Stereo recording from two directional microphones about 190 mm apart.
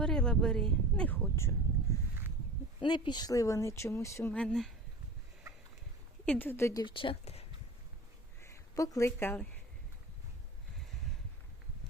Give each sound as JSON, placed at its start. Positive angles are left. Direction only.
{"t": 0.0, "sound": "speech", "side_deg": 5}
{"t": 2.8, "sound": "speech", "side_deg": 25}
{"t": 6.2, "sound": "speech", "side_deg": 5}
{"t": 6.8, "sound": "speech", "side_deg": 25}
{"t": 8.4, "sound": "a woman's voice", "side_deg": 15}